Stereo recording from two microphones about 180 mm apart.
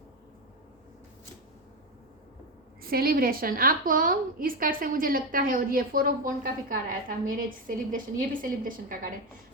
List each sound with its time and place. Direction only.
2.8 s a woman's voice: 55° right (ahead or behind)